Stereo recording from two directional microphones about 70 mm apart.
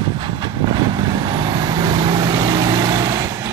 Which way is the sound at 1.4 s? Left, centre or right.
Right.